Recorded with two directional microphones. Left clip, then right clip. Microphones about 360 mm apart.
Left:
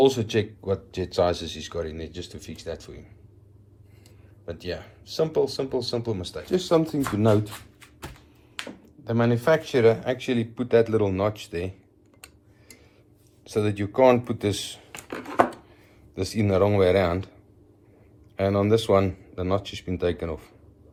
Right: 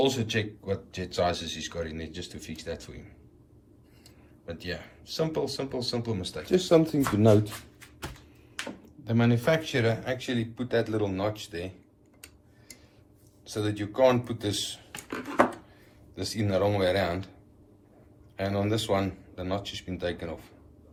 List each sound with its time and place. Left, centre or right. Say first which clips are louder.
0.0 s speech: left 6 dB; centre
4.4 s speech: left 4 dB; centre
7.1 s speech: even; centre
9.0 s speech: left 4 dB; centre
13.5 s speech: left 6 dB; centre
16.2 s speech: left 5 dB; centre
18.3 s speech: left 7 dB; centre